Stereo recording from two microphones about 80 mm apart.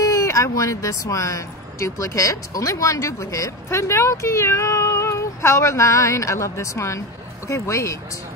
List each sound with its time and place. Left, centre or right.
0.0 s a woman's voice: left